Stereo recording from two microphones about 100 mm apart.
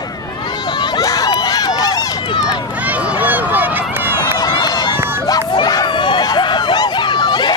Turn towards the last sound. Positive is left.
turn(degrees=50)  # may be behind; listen again after turning